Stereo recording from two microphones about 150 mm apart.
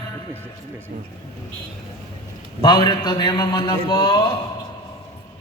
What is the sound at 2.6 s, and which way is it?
A man's voice, 30° left (ahead or behind).